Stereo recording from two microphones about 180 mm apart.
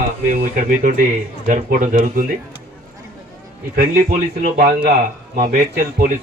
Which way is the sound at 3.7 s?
45° right (ahead or behind).